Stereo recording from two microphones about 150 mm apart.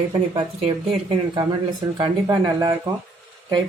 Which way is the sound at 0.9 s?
35° right (ahead or behind).